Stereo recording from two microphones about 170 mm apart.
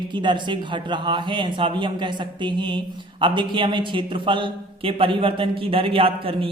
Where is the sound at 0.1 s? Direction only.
30° right (ahead or behind).